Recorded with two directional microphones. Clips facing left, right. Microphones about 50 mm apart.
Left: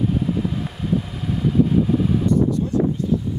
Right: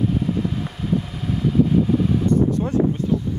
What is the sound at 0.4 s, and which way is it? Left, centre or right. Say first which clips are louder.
Vehicle: even; centre.